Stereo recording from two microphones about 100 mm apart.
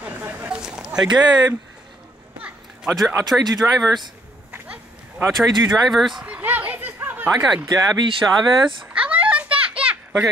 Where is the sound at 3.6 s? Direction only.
5° left (ahead or behind).